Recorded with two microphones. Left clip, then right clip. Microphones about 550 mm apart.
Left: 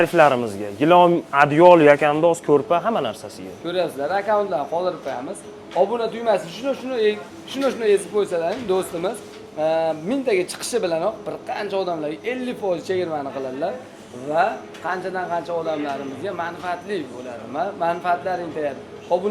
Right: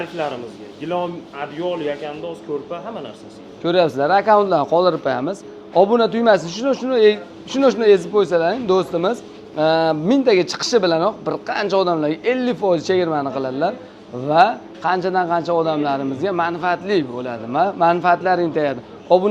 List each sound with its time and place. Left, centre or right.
0.0 s speech: left
3.6 s a man's voice: right
5.7 s a man's voice: right